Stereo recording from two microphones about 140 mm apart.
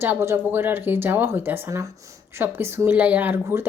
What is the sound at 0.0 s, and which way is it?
A woman's voice, 15° right (ahead or behind).